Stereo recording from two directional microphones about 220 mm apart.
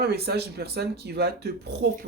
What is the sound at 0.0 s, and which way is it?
Speech, 45° right (ahead or behind).